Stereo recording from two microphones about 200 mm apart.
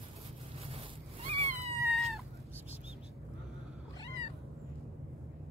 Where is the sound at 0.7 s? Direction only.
30° right (ahead or behind).